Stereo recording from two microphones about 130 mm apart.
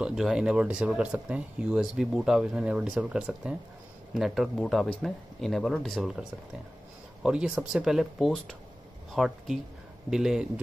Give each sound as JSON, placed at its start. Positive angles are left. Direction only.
{"t": 0.0, "sound": "speech", "side_deg": -5}
{"t": 7.2, "sound": "speech", "side_deg": -5}